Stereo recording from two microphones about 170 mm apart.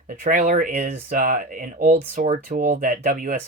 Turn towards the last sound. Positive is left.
turn(degrees=-55)  # may be behind; listen again after turning